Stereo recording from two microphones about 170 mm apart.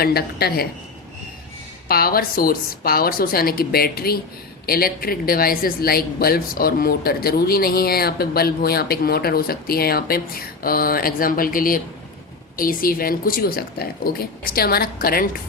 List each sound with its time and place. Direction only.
0.0 s speech: 65° left (ahead or behind)
1.9 s speech: 60° left (ahead or behind)